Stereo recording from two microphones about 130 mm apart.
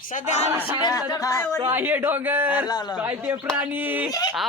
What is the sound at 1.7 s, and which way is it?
Speech, 15° right (ahead or behind).